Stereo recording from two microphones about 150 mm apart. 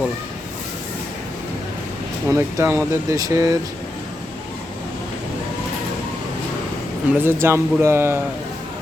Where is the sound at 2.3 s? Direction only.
20° right (ahead or behind).